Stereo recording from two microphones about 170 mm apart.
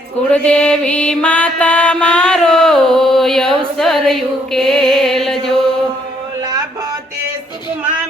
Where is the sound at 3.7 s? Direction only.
Centre (ahead or behind).